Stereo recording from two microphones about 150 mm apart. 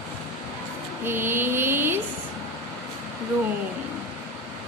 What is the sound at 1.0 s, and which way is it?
Mantra, 15° right (ahead or behind).